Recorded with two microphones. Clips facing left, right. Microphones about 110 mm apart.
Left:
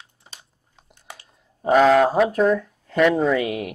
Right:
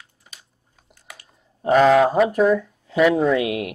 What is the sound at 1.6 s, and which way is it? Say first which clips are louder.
Speech: right 1 dB; centre (ahead or behind).